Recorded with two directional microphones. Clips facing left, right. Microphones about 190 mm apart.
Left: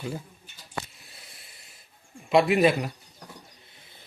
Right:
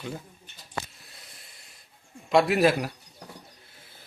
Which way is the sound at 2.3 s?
Centre (ahead or behind).